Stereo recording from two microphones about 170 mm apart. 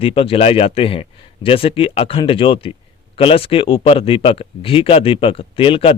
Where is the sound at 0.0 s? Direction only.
35° left (ahead or behind).